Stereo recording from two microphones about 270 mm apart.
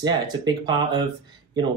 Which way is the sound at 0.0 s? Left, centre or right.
Centre.